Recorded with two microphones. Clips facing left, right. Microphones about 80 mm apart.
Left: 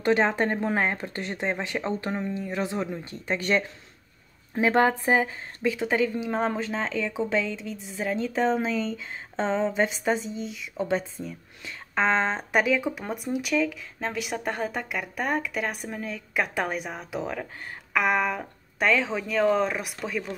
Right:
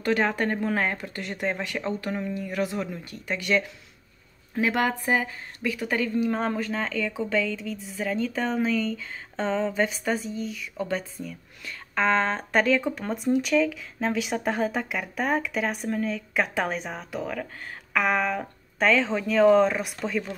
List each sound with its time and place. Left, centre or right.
0.0 s speech: left; by 20.3 s centre